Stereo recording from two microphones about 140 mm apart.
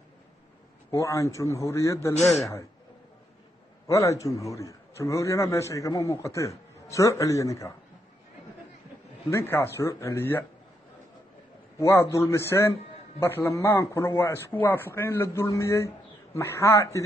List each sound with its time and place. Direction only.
0.9 s a man's voice: 20° left (ahead or behind)
3.8 s a man's voice: 20° left (ahead or behind)
9.3 s a man's voice: 20° left (ahead or behind)
11.8 s a man's voice: 20° left (ahead or behind)